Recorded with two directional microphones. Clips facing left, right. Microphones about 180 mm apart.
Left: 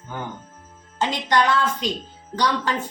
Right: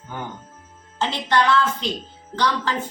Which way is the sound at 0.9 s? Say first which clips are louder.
Even; 15° left (ahead or behind).